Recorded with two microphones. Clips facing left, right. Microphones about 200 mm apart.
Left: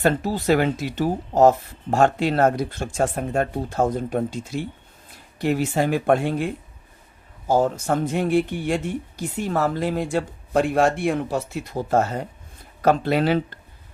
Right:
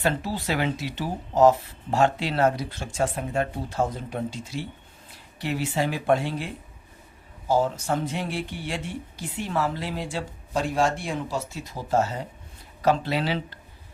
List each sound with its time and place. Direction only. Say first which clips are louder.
0.0 s speech: left 5 dB; 45° left (ahead or behind)